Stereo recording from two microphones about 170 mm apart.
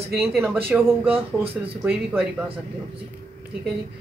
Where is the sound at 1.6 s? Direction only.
10° right (ahead or behind).